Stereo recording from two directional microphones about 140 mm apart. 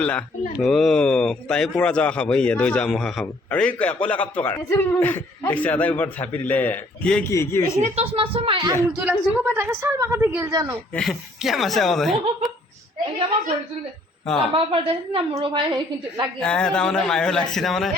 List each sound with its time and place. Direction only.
0.0 s a man's voice: 10° left (ahead or behind)
7.3 s speech: 20° left (ahead or behind)
7.8 s speech: 55° right (ahead or behind)
8.1 s a woman's voice: 40° right (ahead or behind)
9.0 s a woman's voice: 15° right (ahead or behind)
10.9 s a man's voice: centre (ahead or behind)
14.5 s a woman's voice: 40° right (ahead or behind)
16.4 s a man's voice: 5° left (ahead or behind)